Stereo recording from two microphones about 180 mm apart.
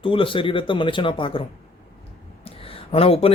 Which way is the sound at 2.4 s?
30° left (ahead or behind).